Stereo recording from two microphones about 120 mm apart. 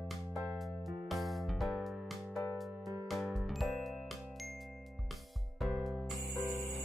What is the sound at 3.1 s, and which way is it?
Music, centre (ahead or behind).